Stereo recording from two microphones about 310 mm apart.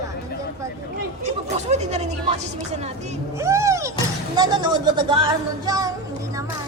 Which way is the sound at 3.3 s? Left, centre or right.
Centre.